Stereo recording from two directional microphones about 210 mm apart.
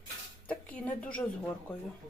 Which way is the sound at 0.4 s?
5° left (ahead or behind).